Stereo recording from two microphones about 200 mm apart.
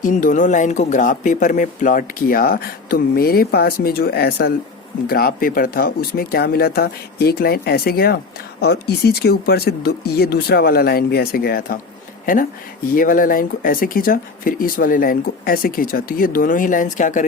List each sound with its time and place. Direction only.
0.0 s speech: 40° left (ahead or behind)